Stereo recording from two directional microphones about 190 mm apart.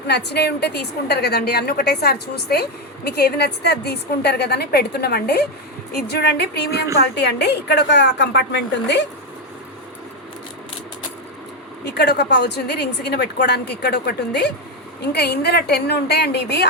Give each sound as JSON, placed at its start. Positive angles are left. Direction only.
{"t": 0.1, "sound": "a woman's voice", "side_deg": 60}
{"t": 11.9, "sound": "a woman's voice", "side_deg": 60}